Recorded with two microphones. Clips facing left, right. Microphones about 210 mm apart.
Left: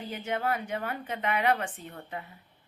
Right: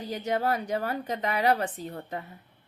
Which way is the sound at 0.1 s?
40° right (ahead or behind).